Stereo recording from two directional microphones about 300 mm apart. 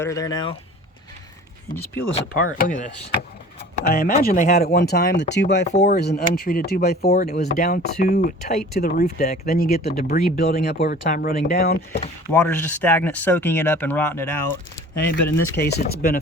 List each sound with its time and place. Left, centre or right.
0.0 s speech: centre
2.1 s speech: left
12.3 s speech: centre
15.4 s speech: left